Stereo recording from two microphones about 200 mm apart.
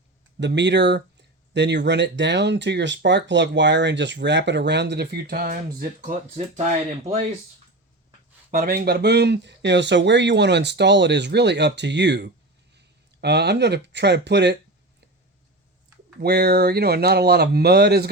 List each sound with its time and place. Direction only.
0.3 s speech: 60° right (ahead or behind); by 7.3 s 35° right (ahead or behind)
8.4 s speech: 45° right (ahead or behind)
16.2 s speech: 50° right (ahead or behind)